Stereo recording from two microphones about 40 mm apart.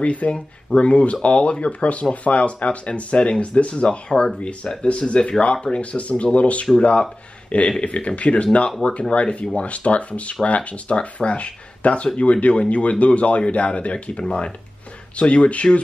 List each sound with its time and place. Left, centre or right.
0.0 s speech: left
14.2 s speech: centre
15.1 s speech: left